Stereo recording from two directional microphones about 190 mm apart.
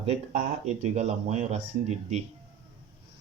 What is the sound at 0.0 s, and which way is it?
Speech, 35° right (ahead or behind).